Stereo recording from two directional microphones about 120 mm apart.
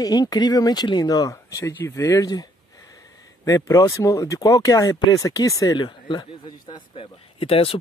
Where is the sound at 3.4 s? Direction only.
25° left (ahead or behind).